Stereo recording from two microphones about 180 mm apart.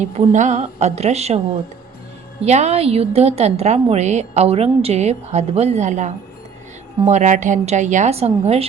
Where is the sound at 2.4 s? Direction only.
40° right (ahead or behind).